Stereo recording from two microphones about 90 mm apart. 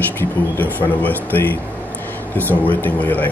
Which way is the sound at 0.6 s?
20° left (ahead or behind).